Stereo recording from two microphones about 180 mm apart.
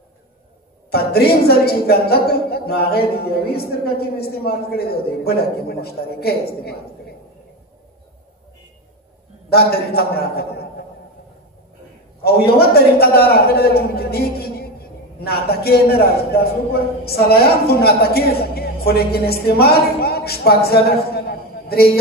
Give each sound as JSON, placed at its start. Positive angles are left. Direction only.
{"t": 0.9, "sound": "a man's voice", "side_deg": 60}
{"t": 9.5, "sound": "a man's voice", "side_deg": 60}
{"t": 12.2, "sound": "a man's voice", "side_deg": 60}